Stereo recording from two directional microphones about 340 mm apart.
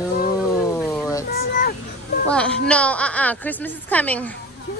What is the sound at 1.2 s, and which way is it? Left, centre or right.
Speech, left.